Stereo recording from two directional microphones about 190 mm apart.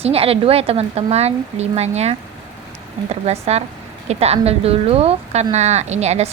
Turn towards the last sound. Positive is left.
turn(degrees=-35)  # may be behind; listen again after turning